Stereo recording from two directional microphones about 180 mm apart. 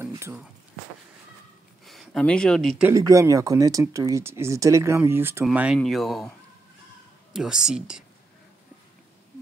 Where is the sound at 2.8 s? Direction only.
20° right (ahead or behind).